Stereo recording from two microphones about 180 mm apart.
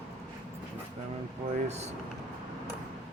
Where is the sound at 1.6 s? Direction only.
40° right (ahead or behind).